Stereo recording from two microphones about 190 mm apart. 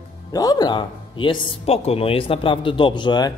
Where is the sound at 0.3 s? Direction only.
20° left (ahead or behind).